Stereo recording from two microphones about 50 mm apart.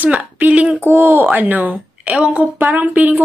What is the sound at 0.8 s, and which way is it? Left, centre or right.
Speech, right.